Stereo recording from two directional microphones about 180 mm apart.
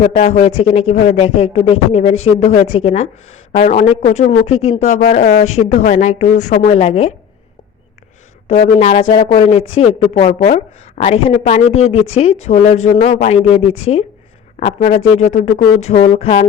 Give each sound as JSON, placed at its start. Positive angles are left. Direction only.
{"t": 0.2, "sound": "speech", "side_deg": 40}
{"t": 6.8, "sound": "speech", "side_deg": 35}
{"t": 8.8, "sound": "speech", "side_deg": 35}